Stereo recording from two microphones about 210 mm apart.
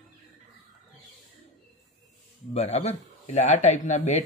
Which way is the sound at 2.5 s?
30° left (ahead or behind).